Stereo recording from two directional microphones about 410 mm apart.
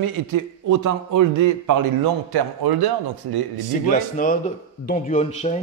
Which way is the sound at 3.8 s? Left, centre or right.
Centre.